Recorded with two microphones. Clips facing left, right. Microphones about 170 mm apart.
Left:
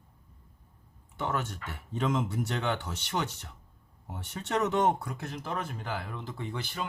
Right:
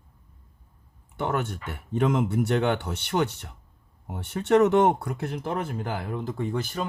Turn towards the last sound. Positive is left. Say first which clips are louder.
# right 7 dB
turn(degrees=-45)  # may be behind; listen again after turning